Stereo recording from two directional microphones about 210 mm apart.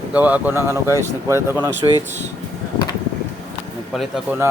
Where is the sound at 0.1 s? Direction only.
5° right (ahead or behind).